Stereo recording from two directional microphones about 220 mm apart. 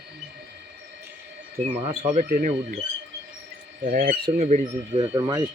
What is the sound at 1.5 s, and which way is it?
Speech, 30° right (ahead or behind).